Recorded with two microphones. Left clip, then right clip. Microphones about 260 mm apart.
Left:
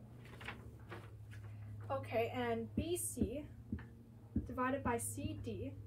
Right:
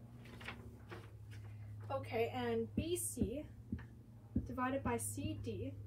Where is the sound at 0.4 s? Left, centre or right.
Centre.